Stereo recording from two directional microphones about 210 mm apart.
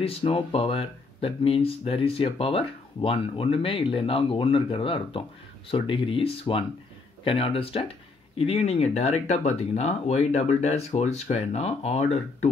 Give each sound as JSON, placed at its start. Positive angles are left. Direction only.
{"t": 0.0, "sound": "speech", "side_deg": 25}